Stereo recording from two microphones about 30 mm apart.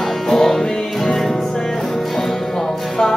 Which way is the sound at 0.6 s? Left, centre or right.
Centre.